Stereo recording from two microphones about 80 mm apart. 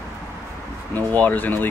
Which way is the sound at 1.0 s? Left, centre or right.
Left.